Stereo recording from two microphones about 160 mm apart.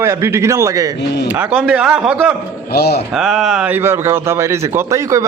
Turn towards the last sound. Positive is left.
turn(degrees=-20)  # may be behind; listen again after turning